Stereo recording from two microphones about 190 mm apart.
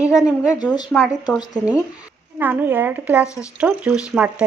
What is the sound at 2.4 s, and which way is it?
Speech, 10° right (ahead or behind).